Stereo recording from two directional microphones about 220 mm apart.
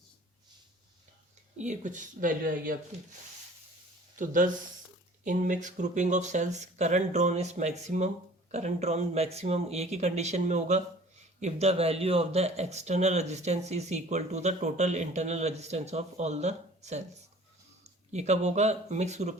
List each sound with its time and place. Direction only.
1.5 s speech: 35° right (ahead or behind)
4.2 s speech: 35° right (ahead or behind)